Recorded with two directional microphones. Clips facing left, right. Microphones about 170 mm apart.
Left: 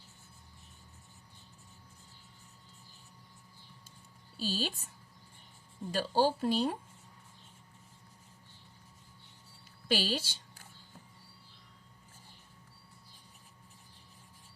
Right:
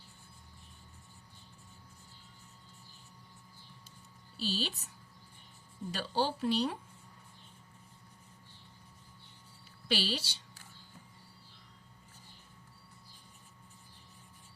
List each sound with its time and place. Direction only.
4.4 s speech: 45° left (ahead or behind)
5.9 s speech: 45° left (ahead or behind)
9.9 s speech: 45° left (ahead or behind)